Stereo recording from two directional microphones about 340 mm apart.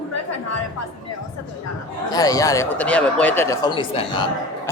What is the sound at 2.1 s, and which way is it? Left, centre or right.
Speech, centre.